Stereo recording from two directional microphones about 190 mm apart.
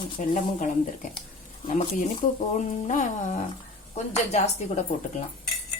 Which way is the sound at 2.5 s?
40° left (ahead or behind).